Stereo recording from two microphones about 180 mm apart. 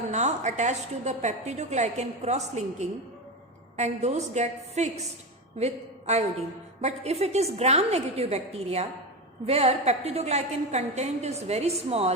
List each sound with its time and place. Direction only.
0.1 s a woman's voice: 40° right (ahead or behind)